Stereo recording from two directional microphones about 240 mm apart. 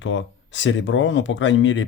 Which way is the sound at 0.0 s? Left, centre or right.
Left.